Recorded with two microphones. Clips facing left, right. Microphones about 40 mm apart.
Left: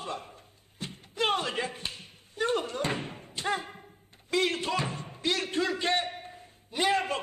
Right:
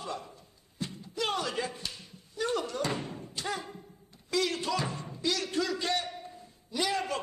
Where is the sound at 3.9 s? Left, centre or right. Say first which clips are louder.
Left 3 dB; left.